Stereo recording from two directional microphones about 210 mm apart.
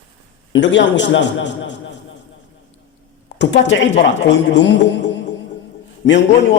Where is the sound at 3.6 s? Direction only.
60° left (ahead or behind).